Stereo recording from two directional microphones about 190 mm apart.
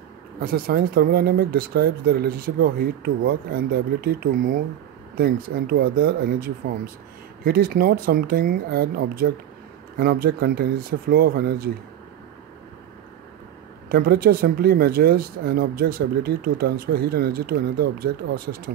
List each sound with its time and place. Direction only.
0.4 s speech: 50° right (ahead or behind)
13.8 s speech: 55° right (ahead or behind)